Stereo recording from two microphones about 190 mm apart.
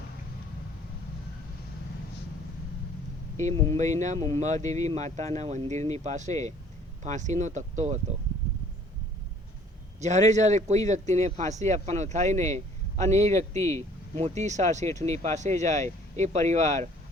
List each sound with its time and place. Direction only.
3.8 s speech: 40° right (ahead or behind)
10.0 s speech: 40° right (ahead or behind)
13.6 s speech: 15° left (ahead or behind)
14.2 s speech: 35° right (ahead or behind)
14.8 s speech: 15° left (ahead or behind)
15.4 s speech: 40° right (ahead or behind)